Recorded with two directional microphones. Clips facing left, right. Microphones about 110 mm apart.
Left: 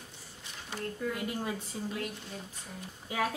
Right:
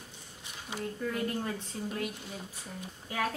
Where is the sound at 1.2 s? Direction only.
10° left (ahead or behind).